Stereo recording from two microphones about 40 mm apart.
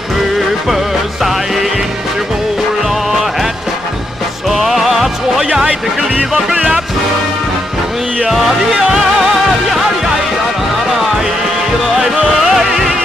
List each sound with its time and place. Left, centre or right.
4.5 s music: centre
6.5 s music: right
8.7 s music: centre
11.9 s music: centre